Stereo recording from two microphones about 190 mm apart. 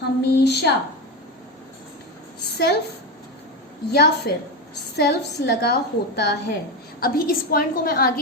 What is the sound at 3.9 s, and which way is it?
A woman's voice, 55° left (ahead or behind).